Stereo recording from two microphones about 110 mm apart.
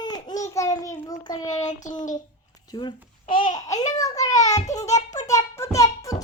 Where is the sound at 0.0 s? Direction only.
40° left (ahead or behind).